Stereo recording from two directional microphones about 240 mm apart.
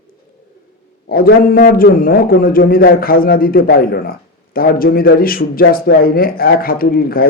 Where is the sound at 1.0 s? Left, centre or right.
Left.